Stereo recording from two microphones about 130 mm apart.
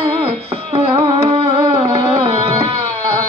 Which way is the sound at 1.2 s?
35° right (ahead or behind).